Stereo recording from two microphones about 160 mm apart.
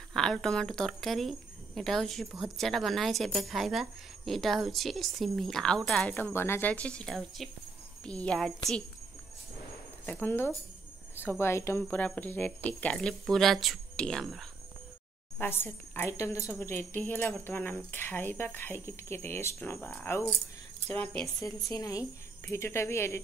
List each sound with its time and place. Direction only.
0.1 s speech: 5° left (ahead or behind)
10.0 s speech: 10° left (ahead or behind)
15.3 s speech: 15° left (ahead or behind)
21.6 s speech: 20° left (ahead or behind)